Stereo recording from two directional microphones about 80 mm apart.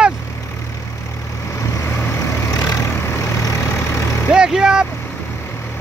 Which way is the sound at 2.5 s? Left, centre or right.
Left.